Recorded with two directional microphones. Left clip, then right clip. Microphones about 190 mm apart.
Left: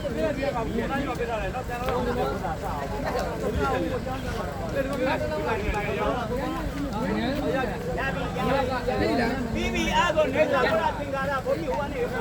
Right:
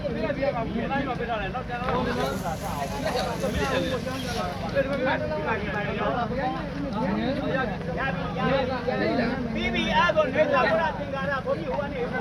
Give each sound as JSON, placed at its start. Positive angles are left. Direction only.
{"t": 9.7, "sound": "speech", "side_deg": 30}